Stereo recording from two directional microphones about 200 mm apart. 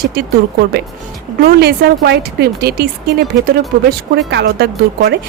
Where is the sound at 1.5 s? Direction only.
50° right (ahead or behind).